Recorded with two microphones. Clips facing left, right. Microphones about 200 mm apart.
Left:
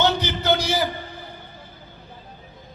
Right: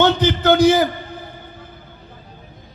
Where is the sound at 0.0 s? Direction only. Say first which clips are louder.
Right 6 dB; 50° right (ahead or behind).